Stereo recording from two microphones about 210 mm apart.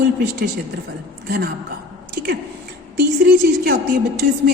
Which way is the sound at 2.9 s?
45° right (ahead or behind).